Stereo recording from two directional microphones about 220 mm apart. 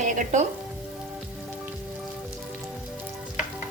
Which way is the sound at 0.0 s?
35° right (ahead or behind).